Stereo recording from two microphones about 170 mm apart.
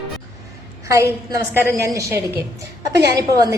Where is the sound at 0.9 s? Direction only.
20° right (ahead or behind).